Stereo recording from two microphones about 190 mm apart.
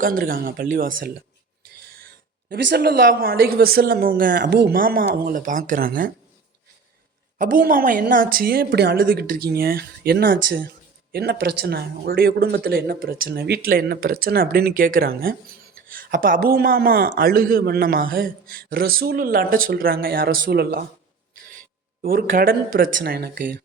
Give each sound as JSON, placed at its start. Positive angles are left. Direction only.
{"t": 0.0, "sound": "speech", "side_deg": -50}
{"t": 7.3, "sound": "speech", "side_deg": -50}
{"t": 22.0, "sound": "speech", "side_deg": -50}